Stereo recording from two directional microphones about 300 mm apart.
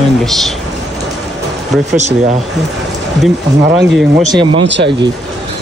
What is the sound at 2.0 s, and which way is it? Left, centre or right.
Speech, right.